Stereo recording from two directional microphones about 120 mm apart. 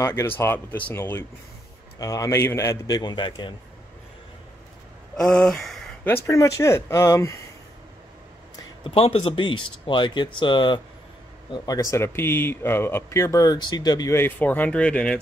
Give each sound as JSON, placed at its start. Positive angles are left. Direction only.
{"t": 0.0, "sound": "speech", "side_deg": 20}
{"t": 2.0, "sound": "speech", "side_deg": 30}
{"t": 3.0, "sound": "speech", "side_deg": 40}
{"t": 5.1, "sound": "speech", "side_deg": 5}
{"t": 6.0, "sound": "speech", "side_deg": 20}
{"t": 8.8, "sound": "speech", "side_deg": 55}
{"t": 14.2, "sound": "speech", "side_deg": 15}